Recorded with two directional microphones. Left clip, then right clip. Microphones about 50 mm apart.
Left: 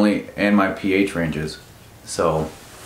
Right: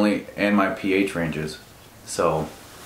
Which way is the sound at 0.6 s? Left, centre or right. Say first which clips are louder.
Left 2 dB; left.